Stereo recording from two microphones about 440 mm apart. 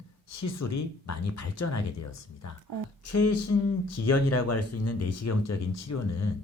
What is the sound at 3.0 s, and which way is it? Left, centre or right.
Speech, left.